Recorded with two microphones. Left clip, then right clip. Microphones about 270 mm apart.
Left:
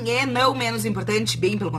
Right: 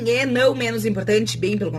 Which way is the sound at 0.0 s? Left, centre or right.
Centre.